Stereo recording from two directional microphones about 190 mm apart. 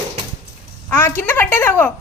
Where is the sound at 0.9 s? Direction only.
10° left (ahead or behind).